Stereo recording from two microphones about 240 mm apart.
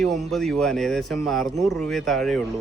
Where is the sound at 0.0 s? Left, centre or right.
Centre.